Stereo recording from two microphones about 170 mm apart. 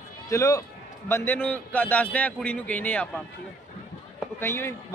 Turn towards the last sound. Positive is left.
turn(degrees=15)  # may be behind; listen again after turning